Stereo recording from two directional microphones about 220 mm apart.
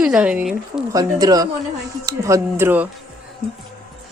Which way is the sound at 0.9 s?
15° right (ahead or behind).